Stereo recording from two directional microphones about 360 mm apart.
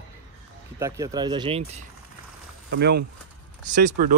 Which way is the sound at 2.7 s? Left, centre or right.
Right.